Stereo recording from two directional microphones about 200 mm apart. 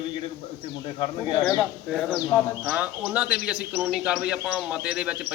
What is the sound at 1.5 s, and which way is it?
A man's voice, centre (ahead or behind).